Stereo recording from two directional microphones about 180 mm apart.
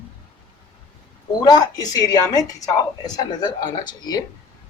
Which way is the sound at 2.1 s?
20° left (ahead or behind).